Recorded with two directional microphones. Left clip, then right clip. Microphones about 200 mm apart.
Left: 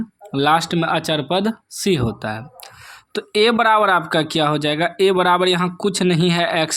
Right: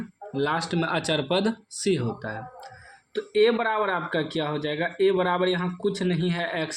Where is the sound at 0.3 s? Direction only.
40° left (ahead or behind).